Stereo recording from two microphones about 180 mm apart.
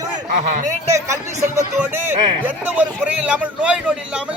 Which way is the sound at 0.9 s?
15° right (ahead or behind).